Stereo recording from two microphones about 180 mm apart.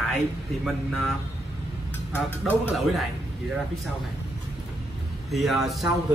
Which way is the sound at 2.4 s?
Centre (ahead or behind).